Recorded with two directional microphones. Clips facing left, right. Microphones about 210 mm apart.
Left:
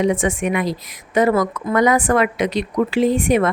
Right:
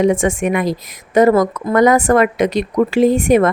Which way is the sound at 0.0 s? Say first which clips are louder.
Right 4 dB; 45° right (ahead or behind).